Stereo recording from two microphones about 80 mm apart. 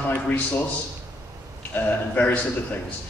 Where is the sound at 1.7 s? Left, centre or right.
Centre.